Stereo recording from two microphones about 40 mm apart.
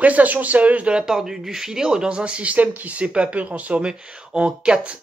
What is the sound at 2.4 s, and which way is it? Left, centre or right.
Speech, right.